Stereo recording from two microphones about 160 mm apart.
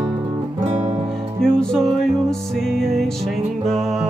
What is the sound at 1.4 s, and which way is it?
Music, 5° left (ahead or behind).